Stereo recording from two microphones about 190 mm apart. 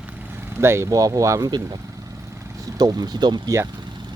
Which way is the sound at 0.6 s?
15° right (ahead or behind).